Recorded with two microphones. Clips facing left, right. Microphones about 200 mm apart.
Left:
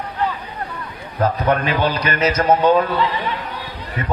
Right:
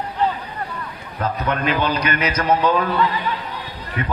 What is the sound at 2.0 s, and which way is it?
A man's voice, 25° left (ahead or behind).